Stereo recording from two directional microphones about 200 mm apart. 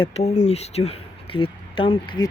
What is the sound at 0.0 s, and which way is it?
Speech, 30° left (ahead or behind).